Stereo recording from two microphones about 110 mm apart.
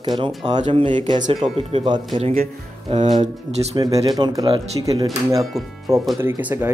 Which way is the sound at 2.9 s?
90° right.